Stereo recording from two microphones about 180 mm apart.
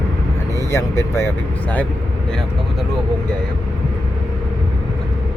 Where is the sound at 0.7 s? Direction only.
15° left (ahead or behind).